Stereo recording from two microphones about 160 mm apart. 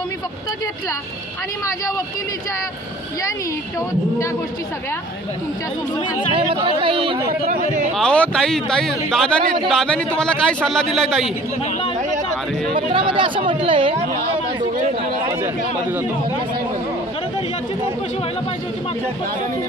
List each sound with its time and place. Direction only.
6.3 s speech: 35° right (ahead or behind)
7.9 s a man's voice: 5° left (ahead or behind)
12.7 s speech: 30° right (ahead or behind)